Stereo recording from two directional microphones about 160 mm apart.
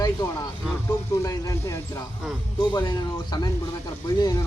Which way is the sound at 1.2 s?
20° left (ahead or behind).